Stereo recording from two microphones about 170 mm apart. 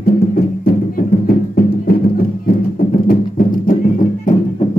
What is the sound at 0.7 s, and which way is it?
Music, 60° left (ahead or behind).